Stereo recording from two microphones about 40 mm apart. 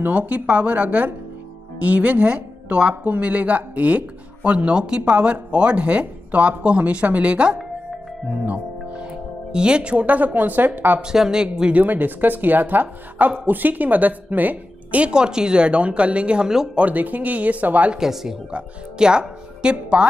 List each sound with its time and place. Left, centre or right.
0.1 s speech: right
3.2 s speech: right
4.7 s speech: right
9.5 s speech: right
11.1 s speech: centre
11.8 s a woman's voice: right
15.0 s speech: right
16.7 s speech: right
17.9 s speech: centre
18.9 s speech: right